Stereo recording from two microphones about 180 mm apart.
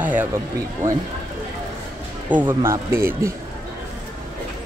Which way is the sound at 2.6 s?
15° right (ahead or behind).